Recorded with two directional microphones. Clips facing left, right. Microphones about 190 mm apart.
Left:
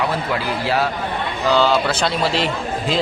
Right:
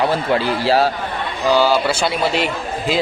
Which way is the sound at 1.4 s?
10° right (ahead or behind).